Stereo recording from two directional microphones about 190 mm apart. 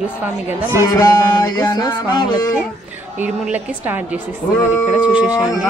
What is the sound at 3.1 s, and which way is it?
A woman's voice, 10° right (ahead or behind).